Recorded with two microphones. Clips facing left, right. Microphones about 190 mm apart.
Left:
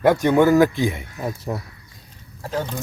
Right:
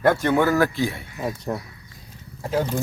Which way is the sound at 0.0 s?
15° left (ahead or behind).